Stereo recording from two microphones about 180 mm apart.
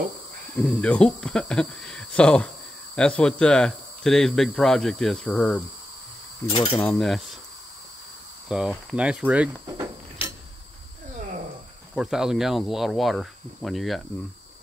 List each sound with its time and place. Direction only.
0.7 s speech: 5° left (ahead or behind)
6.5 s speech: 30° left (ahead or behind)
6.8 s speech: centre (ahead or behind)
8.5 s speech: 5° right (ahead or behind)
11.9 s speech: 5° right (ahead or behind)